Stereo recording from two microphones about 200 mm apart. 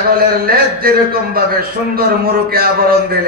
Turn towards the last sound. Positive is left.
turn(degrees=-45)  # may be behind; listen again after turning